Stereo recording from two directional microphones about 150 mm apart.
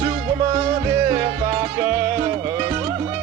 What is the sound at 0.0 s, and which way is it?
Music, 30° right (ahead or behind).